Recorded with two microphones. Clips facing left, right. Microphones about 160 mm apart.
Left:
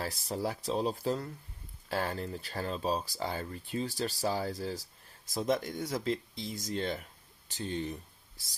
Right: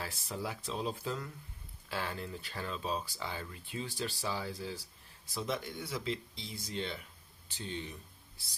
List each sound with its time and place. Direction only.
0.0 s speech: 40° left (ahead or behind)